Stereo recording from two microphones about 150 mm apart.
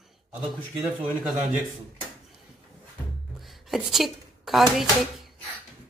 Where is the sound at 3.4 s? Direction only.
Centre (ahead or behind).